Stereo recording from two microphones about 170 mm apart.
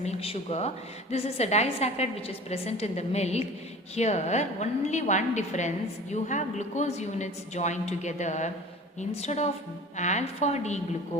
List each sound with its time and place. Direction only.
0.0 s a woman's voice: 40° left (ahead or behind)